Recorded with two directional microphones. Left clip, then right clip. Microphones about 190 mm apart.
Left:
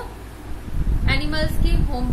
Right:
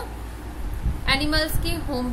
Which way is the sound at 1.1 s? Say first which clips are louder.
Right 2 dB; 55° right (ahead or behind).